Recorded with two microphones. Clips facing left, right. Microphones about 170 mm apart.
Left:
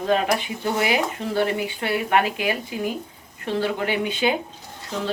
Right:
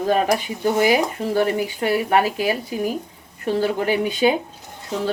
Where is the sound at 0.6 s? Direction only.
40° right (ahead or behind).